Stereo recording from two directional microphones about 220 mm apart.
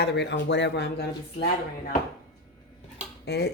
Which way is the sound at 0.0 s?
50° left (ahead or behind).